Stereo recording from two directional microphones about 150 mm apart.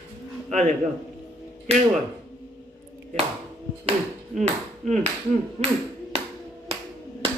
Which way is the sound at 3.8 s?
50° right (ahead or behind).